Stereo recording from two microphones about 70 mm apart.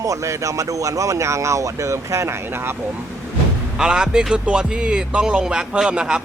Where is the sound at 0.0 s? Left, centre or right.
Right.